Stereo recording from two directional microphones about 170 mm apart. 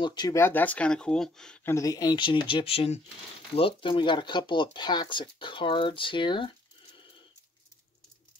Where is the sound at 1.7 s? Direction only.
20° left (ahead or behind).